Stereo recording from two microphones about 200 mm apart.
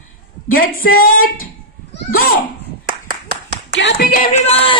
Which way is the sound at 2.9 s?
50° right (ahead or behind).